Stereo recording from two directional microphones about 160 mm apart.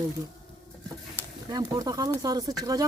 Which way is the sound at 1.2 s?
15° left (ahead or behind).